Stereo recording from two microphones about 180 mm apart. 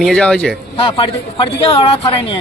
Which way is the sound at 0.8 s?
30° left (ahead or behind).